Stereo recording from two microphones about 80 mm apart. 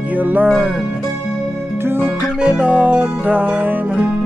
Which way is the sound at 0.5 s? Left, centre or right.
Centre.